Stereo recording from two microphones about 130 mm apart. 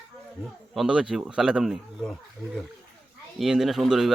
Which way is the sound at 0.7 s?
5° right (ahead or behind).